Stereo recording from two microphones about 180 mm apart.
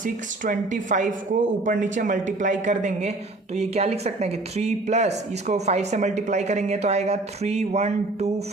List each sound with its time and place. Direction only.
0.0 s speech: 45° right (ahead or behind)